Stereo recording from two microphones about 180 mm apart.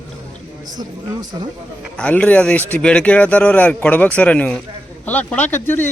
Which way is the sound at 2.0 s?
5° left (ahead or behind).